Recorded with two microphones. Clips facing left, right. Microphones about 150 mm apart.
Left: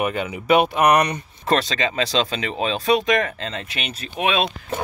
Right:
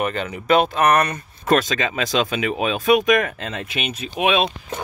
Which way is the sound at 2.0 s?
15° right (ahead or behind).